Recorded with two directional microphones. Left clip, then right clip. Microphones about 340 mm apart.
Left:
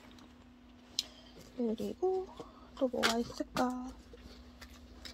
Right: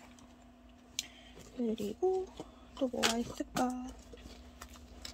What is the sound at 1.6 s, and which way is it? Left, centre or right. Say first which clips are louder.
Speech: even; centre.